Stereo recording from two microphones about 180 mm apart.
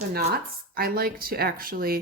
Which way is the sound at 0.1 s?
60° right (ahead or behind).